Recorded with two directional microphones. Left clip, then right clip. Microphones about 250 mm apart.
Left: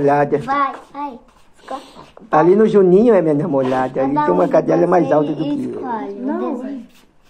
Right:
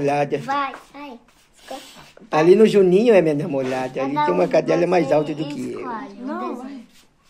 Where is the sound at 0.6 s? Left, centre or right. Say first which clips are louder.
Left 8 dB; right.